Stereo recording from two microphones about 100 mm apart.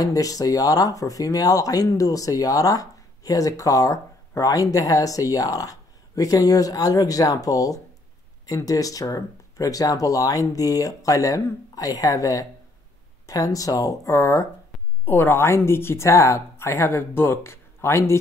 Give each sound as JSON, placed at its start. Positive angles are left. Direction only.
{"t": 0.0, "sound": "speech", "side_deg": 35}
{"t": 15.0, "sound": "a woman's voice", "side_deg": 20}